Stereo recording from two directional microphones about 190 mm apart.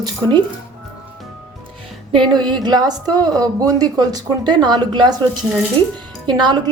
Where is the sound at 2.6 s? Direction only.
20° right (ahead or behind).